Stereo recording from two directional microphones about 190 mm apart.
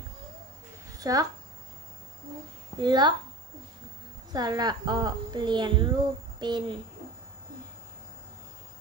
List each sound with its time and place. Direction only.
0.9 s speech: 20° right (ahead or behind)
2.8 s a woman's voice: 25° right (ahead or behind)
4.3 s a woman's voice: 20° right (ahead or behind)